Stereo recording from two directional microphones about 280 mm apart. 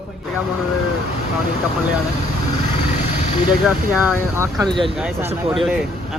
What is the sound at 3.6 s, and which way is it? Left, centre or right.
A man's voice, centre.